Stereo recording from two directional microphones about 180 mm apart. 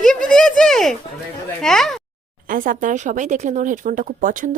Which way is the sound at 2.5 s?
50° right (ahead or behind).